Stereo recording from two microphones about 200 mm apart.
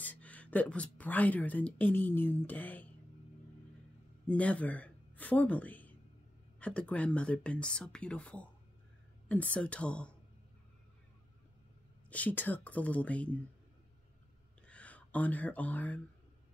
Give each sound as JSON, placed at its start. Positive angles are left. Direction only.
{"t": 0.0, "sound": "speech", "side_deg": 10}
{"t": 4.3, "sound": "a woman's voice", "side_deg": 5}
{"t": 12.1, "sound": "speech", "side_deg": 10}
{"t": 14.7, "sound": "speech", "side_deg": 5}